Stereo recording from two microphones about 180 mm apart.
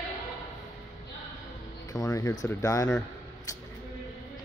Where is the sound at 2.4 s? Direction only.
20° left (ahead or behind).